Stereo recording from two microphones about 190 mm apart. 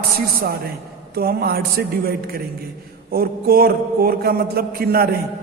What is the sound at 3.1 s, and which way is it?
A man's voice, 50° right (ahead or behind).